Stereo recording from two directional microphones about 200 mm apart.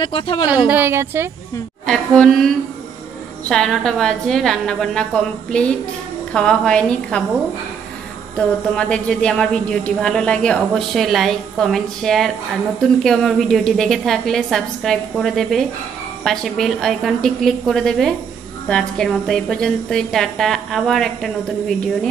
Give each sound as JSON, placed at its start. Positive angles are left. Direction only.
{"t": 0.0, "sound": "a woman's voice", "side_deg": 25}
{"t": 0.7, "sound": "a woman's voice", "side_deg": -10}
{"t": 1.9, "sound": "speech", "side_deg": 0}
{"t": 8.7, "sound": "speech", "side_deg": 5}